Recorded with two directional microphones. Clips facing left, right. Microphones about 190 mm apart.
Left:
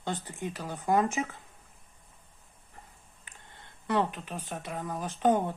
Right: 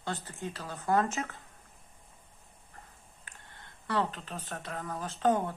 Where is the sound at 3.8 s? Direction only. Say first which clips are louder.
Left 3 dB; 15° left (ahead or behind).